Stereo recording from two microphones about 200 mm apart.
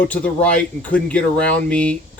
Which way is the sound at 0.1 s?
5° left (ahead or behind).